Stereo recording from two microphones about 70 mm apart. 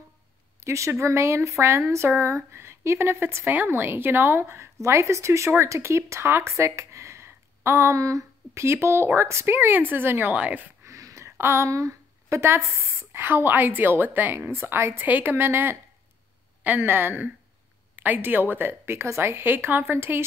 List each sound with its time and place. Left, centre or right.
0.6 s speech: right
10.3 s a woman's voice: right
10.8 s a woman's voice: right